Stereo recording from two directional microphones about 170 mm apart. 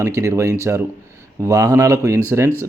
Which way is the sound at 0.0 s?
15° right (ahead or behind).